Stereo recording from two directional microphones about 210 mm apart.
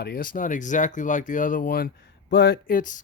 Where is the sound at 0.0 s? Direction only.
45° left (ahead or behind).